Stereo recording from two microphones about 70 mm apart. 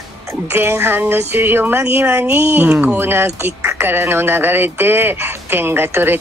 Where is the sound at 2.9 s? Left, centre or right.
Right.